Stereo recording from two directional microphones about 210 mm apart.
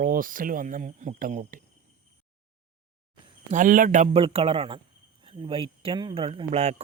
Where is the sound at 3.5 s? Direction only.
40° right (ahead or behind).